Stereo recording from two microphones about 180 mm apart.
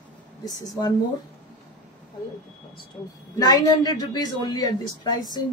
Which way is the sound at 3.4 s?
20° left (ahead or behind).